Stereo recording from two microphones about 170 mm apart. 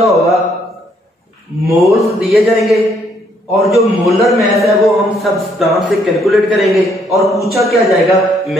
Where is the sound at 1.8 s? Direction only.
Centre (ahead or behind).